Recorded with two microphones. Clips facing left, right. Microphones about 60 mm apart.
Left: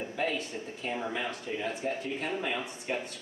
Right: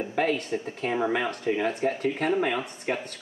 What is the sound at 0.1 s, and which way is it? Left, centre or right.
Speech, right.